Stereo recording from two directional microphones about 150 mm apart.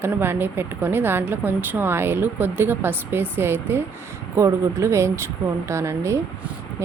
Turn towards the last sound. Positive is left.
turn(degrees=-15)  # may be behind; listen again after turning